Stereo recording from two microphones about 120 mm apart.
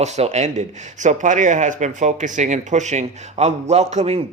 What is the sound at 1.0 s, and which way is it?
Speech, 90° right.